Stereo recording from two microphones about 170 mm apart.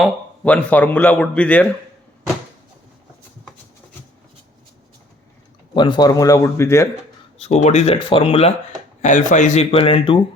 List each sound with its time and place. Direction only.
0.0 s a man's voice: 10° left (ahead or behind)
5.7 s speech: 25° left (ahead or behind)
7.3 s speech: 40° left (ahead or behind)
9.0 s speech: 45° left (ahead or behind)